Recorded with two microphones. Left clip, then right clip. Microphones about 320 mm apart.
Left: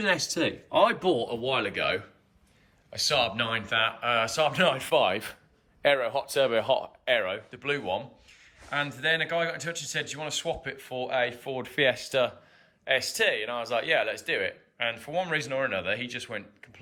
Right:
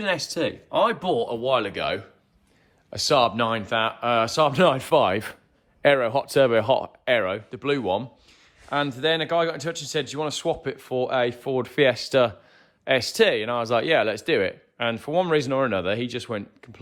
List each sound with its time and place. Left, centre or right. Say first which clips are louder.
0.0 s speech: right 1 dB; centre; by 7.7 s right
8.7 s speech: right 4 dB; centre